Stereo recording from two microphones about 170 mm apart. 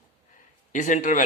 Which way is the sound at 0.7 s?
45° left (ahead or behind).